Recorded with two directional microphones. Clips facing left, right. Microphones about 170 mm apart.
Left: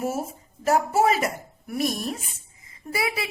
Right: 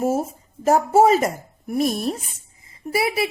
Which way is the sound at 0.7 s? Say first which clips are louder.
Right 5 dB; 40° right (ahead or behind).